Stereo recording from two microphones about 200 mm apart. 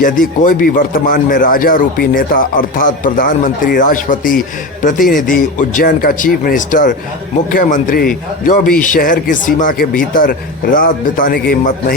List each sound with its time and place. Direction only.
0.0 s a man's voice: 40° left (ahead or behind)